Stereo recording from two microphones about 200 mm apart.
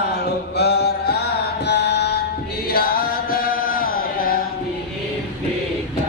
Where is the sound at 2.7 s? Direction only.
50° left (ahead or behind).